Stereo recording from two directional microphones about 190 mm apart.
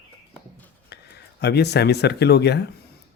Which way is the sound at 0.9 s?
60° left (ahead or behind).